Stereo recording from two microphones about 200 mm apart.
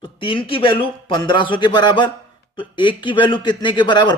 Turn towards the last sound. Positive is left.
turn(degrees=20)  # may be behind; listen again after turning